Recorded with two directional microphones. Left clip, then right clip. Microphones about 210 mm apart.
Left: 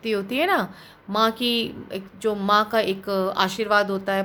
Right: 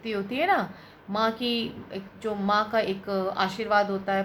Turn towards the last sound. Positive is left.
turn(degrees=50)  # may be behind; listen again after turning